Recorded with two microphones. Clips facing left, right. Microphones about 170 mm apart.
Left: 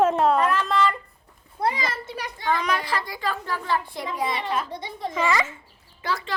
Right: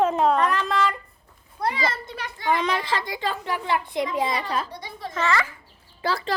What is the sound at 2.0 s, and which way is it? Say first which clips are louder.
Speech: left 1 dB; 5° left (ahead or behind).